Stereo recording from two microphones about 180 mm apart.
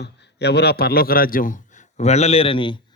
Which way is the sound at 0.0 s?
65° left (ahead or behind).